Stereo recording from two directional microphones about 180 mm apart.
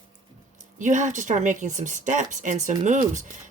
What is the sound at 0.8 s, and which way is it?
A woman's voice, 45° right (ahead or behind).